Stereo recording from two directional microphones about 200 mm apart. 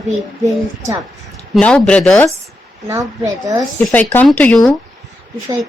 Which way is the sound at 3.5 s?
5° left (ahead or behind).